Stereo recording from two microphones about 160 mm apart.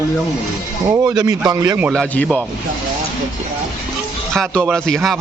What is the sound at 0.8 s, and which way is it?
A man's voice, 25° right (ahead or behind).